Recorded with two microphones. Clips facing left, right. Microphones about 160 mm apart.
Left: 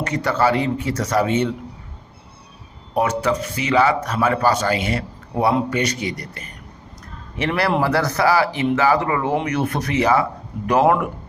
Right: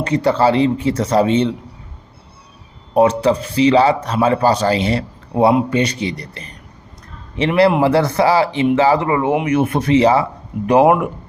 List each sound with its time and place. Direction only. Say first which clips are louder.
0.0 s speech: right 5 dB; 30° right (ahead or behind)
2.9 s speech: right 6 dB; 30° right (ahead or behind)